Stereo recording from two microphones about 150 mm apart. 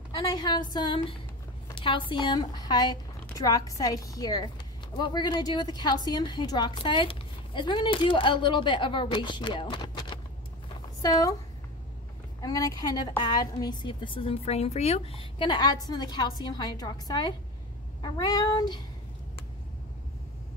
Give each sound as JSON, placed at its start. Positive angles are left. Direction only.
{"t": 0.2, "sound": "a woman's voice", "side_deg": 25}
{"t": 12.4, "sound": "a woman's voice", "side_deg": 25}